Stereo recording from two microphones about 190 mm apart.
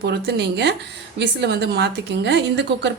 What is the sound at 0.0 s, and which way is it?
A woman's voice, 60° right (ahead or behind).